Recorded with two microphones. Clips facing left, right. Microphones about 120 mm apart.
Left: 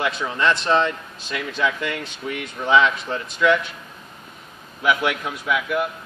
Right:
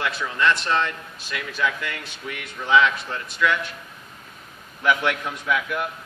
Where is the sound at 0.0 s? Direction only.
20° left (ahead or behind).